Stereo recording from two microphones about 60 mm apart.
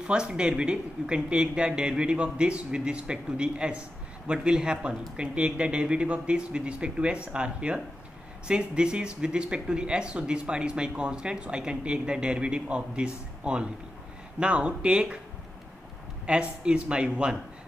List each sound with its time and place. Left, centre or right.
0.0 s speech: centre
16.3 s speech: centre